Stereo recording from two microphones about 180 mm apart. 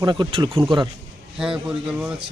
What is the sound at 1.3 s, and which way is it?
Speech, 5° right (ahead or behind).